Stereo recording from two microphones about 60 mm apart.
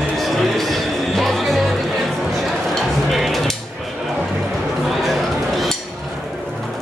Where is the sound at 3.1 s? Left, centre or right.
Centre.